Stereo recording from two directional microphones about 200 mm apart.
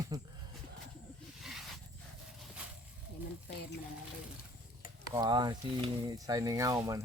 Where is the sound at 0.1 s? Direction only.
15° right (ahead or behind).